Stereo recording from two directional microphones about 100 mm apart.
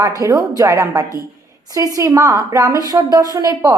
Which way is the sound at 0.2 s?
35° right (ahead or behind).